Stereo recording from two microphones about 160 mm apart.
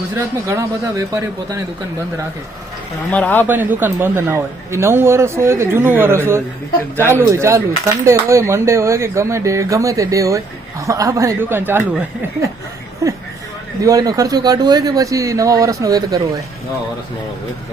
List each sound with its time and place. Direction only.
0.1 s speech: 15° right (ahead or behind)
3.1 s speech: 10° left (ahead or behind)
3.4 s speech: 10° right (ahead or behind)
13.8 s speech: 25° right (ahead or behind)